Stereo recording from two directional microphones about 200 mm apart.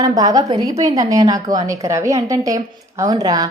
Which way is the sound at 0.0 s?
15° right (ahead or behind).